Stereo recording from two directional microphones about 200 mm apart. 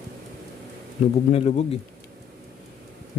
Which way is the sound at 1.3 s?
30° left (ahead or behind).